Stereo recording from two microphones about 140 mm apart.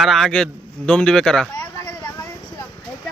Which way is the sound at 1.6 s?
25° left (ahead or behind).